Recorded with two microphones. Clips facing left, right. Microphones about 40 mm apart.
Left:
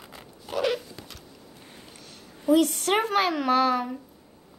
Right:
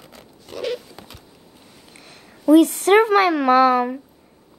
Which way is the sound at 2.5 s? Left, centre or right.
Right.